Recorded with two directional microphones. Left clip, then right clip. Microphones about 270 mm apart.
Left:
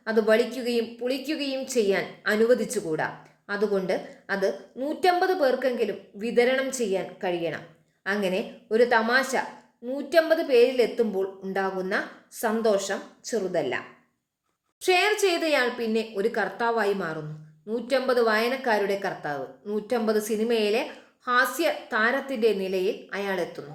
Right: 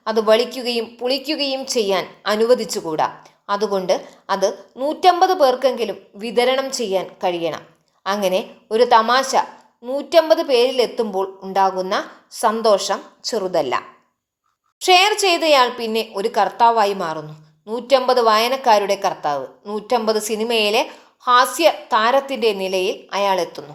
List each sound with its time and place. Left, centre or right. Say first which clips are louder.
0.0 s a woman's voice: right 6 dB; centre